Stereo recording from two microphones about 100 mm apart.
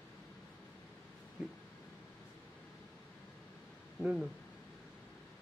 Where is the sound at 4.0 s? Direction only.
10° right (ahead or behind).